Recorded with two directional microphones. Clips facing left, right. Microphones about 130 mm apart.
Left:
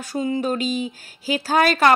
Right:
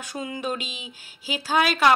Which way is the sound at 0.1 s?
30° left (ahead or behind).